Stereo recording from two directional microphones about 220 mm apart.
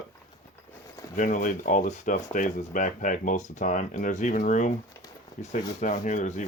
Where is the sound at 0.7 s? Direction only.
15° left (ahead or behind).